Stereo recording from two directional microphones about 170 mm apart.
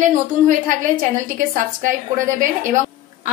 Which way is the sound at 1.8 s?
50° right (ahead or behind).